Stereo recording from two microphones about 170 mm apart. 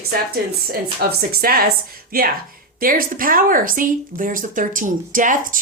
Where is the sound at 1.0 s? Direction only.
60° right (ahead or behind).